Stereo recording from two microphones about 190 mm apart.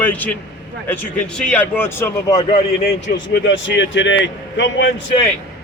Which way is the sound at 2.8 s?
60° left (ahead or behind).